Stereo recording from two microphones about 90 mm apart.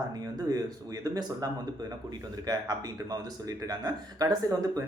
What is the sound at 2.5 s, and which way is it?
Speech, 50° right (ahead or behind).